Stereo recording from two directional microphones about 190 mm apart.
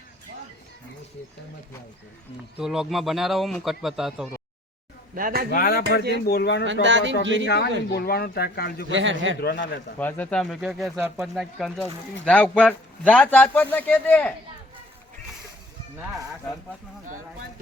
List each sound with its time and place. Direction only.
2.6 s speech: centre (ahead or behind)
5.1 s speech: 50° right (ahead or behind)
5.5 s a man's voice: 50° left (ahead or behind)
6.8 s speech: 75° right (ahead or behind)
7.4 s a man's voice: 60° left (ahead or behind)
8.9 s speech: 80° right
9.4 s a man's voice: 60° left (ahead or behind)
10.0 s speech: 10° left (ahead or behind)